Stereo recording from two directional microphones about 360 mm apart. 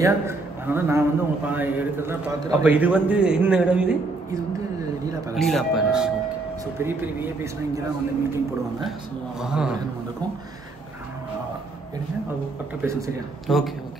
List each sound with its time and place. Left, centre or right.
0.0 s a man's voice: centre
9.4 s a man's voice: centre
12.8 s a man's voice: centre